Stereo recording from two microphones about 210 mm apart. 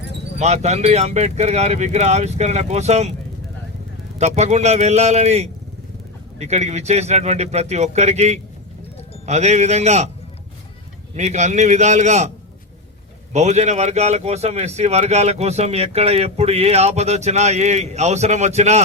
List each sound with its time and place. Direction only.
0.3 s speech: 30° right (ahead or behind)
4.2 s speech: 30° right (ahead or behind)
11.1 s speech: 35° right (ahead or behind)
13.3 s speech: 35° right (ahead or behind)